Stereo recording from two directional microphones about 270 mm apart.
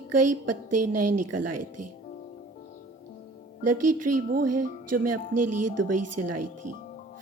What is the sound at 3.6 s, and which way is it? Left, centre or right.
A woman's voice, right.